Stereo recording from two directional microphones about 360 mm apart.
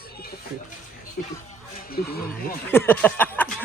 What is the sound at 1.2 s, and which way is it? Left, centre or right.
Speech, left.